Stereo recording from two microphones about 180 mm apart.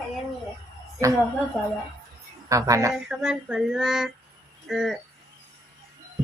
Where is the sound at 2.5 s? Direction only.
20° right (ahead or behind).